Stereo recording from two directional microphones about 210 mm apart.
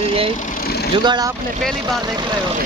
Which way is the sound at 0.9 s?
20° right (ahead or behind).